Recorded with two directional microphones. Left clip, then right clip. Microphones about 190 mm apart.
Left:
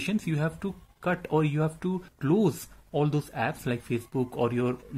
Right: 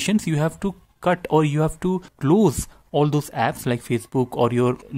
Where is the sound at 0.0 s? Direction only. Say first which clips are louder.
Right 8 dB; 40° right (ahead or behind).